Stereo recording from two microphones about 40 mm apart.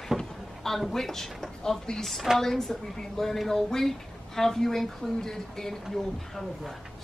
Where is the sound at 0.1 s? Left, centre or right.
Centre.